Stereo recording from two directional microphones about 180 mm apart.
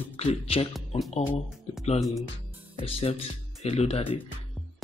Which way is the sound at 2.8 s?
35° left (ahead or behind).